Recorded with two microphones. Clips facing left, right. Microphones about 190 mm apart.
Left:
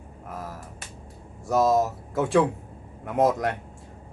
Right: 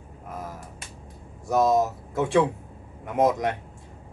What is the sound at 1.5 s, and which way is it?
Speech, centre (ahead or behind).